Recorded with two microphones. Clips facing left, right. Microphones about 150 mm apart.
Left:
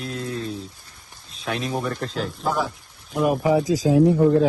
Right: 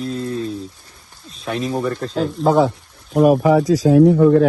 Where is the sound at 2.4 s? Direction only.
65° right (ahead or behind).